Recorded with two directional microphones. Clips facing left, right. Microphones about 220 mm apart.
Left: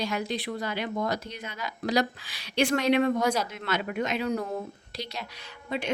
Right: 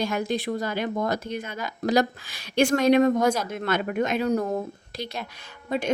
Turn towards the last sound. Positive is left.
turn(degrees=-45)  # may be behind; listen again after turning